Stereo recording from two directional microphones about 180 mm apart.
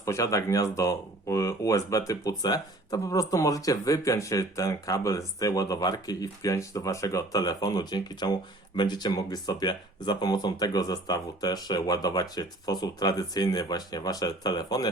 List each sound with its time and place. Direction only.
0.0 s speech: 15° left (ahead or behind)